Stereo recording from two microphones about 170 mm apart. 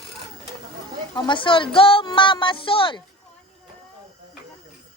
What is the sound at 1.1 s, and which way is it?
Speech, 25° left (ahead or behind).